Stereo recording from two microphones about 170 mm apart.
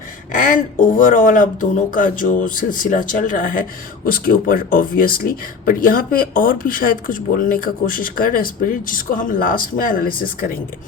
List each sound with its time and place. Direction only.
0.3 s speech: 50° left (ahead or behind)